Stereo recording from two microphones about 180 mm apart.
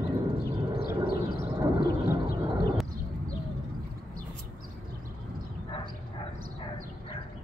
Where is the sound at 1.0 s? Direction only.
55° left (ahead or behind).